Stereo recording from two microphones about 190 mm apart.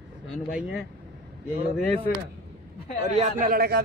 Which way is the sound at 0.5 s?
5° right (ahead or behind).